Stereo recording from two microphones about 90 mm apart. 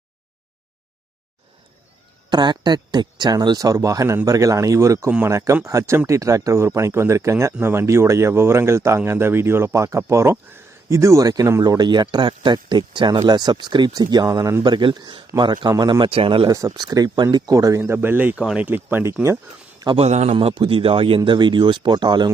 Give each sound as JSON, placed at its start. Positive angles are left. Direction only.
{"t": 2.3, "sound": "speech", "side_deg": -55}
{"t": 11.6, "sound": "speech", "side_deg": -50}
{"t": 13.1, "sound": "speech", "side_deg": -50}
{"t": 14.6, "sound": "speech", "side_deg": -60}
{"t": 15.7, "sound": "speech", "side_deg": -45}
{"t": 16.0, "sound": "a man's voice", "side_deg": -85}
{"t": 16.5, "sound": "speech", "side_deg": -40}
{"t": 19.8, "sound": "a man's voice", "side_deg": -65}
{"t": 21.2, "sound": "speech", "side_deg": -60}